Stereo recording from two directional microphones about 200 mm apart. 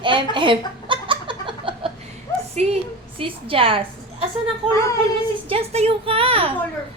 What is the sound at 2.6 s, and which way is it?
A woman's voice, 30° right (ahead or behind).